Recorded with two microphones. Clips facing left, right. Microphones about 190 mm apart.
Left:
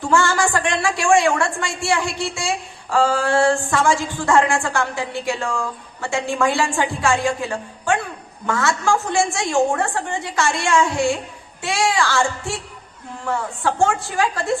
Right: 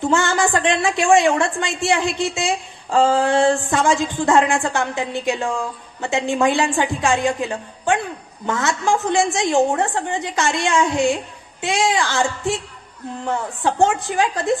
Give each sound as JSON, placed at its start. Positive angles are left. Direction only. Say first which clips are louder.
{"t": 0.1, "sound": "a woman's voice", "louder": "left 2 dB", "side_deg": -20}